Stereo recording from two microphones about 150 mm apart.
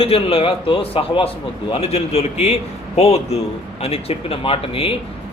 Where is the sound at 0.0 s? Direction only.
40° left (ahead or behind).